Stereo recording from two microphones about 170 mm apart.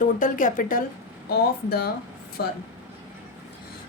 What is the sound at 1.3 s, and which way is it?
Speech, 65° left (ahead or behind).